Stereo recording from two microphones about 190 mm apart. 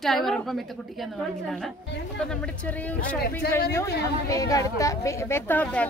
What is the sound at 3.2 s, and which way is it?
Speech, 60° left (ahead or behind).